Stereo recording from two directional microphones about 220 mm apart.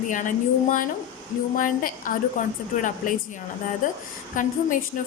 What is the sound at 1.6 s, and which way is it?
A woman's voice, 40° left (ahead or behind).